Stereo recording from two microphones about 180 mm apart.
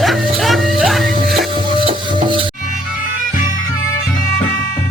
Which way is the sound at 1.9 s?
30° right (ahead or behind).